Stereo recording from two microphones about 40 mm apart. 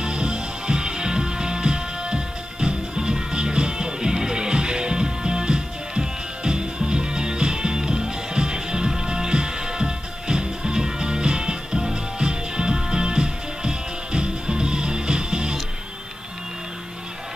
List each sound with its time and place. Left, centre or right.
0.0 s music: right